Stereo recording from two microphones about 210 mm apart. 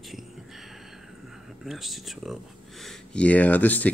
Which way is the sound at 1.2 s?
Centre (ahead or behind).